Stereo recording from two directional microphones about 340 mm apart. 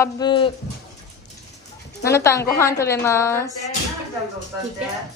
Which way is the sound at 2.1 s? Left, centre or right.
Centre.